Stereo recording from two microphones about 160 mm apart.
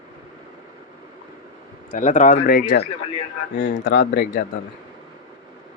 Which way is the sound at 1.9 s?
50° left (ahead or behind).